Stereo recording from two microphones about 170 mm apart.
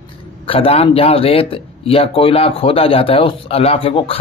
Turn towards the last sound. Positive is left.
turn(degrees=35)  # may be behind; listen again after turning